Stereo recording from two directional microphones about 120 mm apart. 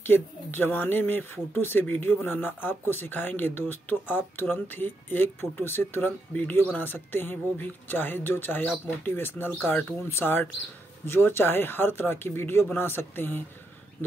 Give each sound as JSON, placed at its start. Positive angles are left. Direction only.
{"t": 0.0, "sound": "speech", "side_deg": 15}